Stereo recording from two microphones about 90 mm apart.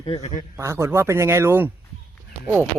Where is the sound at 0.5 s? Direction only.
30° right (ahead or behind).